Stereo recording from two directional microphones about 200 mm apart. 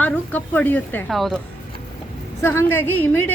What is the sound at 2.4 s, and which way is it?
Speech, 10° left (ahead or behind).